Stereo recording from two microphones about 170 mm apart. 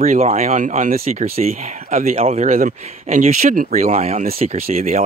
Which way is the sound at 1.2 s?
40° right (ahead or behind).